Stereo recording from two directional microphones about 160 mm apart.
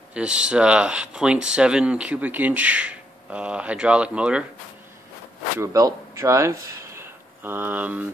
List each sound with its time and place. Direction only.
0.1 s speech: 5° right (ahead or behind)
5.6 s speech: 20° right (ahead or behind)